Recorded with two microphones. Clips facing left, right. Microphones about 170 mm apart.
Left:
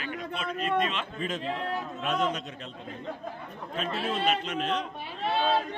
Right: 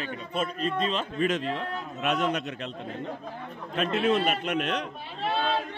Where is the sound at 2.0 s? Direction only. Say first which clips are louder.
Right 3 dB; 70° right (ahead or behind).